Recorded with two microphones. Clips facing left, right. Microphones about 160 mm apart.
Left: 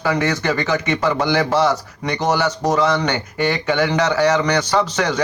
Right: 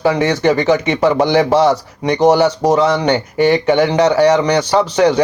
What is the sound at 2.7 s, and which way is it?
A man's voice, 25° right (ahead or behind).